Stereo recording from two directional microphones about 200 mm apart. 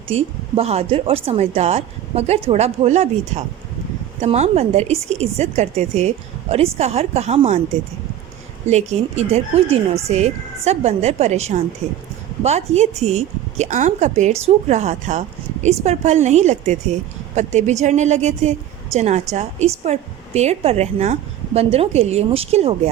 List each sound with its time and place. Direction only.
0.1 s speech: 30° right (ahead or behind)
8.6 s speech: 35° right (ahead or behind)